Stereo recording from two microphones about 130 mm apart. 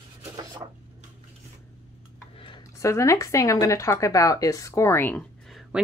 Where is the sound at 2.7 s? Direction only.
25° left (ahead or behind).